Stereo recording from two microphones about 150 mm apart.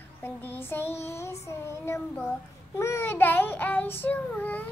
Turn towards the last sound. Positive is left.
turn(degrees=10)  # may be behind; listen again after turning